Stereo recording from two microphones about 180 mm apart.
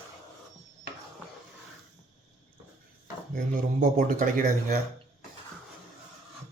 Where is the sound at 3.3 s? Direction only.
45° right (ahead or behind).